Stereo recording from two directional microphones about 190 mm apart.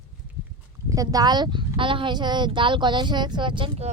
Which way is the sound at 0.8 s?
20° right (ahead or behind).